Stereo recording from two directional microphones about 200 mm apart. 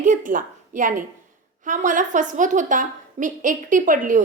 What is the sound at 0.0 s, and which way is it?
A woman's voice, 40° right (ahead or behind).